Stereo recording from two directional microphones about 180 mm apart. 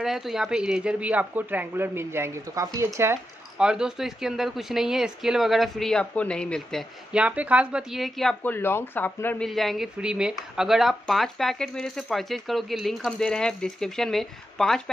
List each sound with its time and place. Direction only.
0.0 s speech: centre (ahead or behind)
7.1 s speech: 5° right (ahead or behind)